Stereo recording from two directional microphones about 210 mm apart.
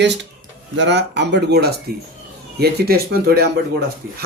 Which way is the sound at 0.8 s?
55° right (ahead or behind).